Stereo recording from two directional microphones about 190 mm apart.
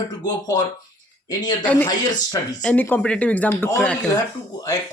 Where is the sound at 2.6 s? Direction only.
10° left (ahead or behind).